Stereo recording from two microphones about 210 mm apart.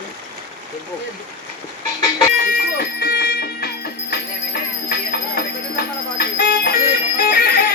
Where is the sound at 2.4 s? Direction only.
45° left (ahead or behind).